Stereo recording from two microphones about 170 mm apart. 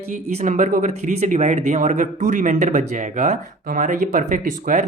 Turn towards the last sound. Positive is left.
turn(degrees=-50)  # may be behind; listen again after turning